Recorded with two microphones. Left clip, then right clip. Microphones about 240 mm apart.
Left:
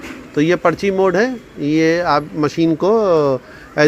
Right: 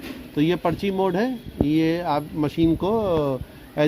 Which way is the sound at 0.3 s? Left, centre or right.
Centre.